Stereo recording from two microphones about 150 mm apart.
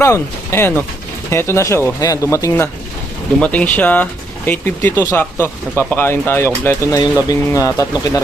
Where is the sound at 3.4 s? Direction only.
10° left (ahead or behind).